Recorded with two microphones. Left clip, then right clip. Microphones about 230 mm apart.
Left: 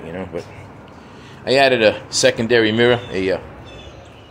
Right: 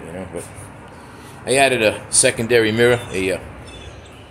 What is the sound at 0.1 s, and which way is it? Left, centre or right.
Speech, centre.